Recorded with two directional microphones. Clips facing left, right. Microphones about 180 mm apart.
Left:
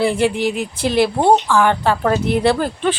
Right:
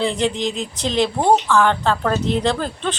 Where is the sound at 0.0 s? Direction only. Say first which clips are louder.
Left 4 dB; 10° left (ahead or behind).